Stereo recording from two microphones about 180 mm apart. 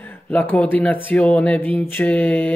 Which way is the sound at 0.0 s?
10° left (ahead or behind).